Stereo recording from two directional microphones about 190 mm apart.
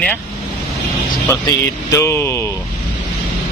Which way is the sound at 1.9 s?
15° left (ahead or behind).